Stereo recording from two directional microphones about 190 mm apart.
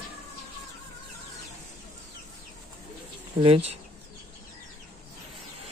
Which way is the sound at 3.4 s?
30° right (ahead or behind).